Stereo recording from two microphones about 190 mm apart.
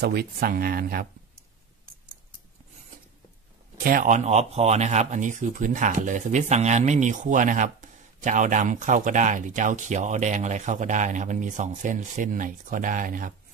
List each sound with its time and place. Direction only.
0.0 s speech: 55° right (ahead or behind)
3.8 s speech: 45° right (ahead or behind)